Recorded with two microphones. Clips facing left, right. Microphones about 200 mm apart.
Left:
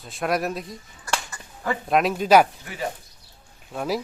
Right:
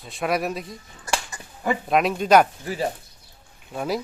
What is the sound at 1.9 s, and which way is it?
Speech, centre (ahead or behind).